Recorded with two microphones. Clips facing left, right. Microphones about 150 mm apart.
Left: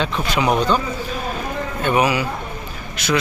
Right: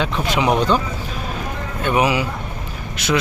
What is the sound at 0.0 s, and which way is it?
Speech, 10° right (ahead or behind).